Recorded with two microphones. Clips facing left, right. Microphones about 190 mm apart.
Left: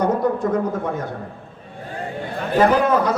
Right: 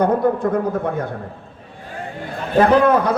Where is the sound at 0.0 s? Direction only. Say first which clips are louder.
Right 2 dB; 55° right (ahead or behind).